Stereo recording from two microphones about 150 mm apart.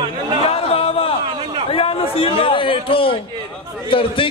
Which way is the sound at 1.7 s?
40° left (ahead or behind).